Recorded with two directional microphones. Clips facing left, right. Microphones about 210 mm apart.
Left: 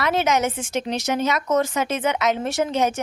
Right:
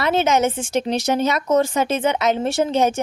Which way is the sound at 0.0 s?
25° right (ahead or behind).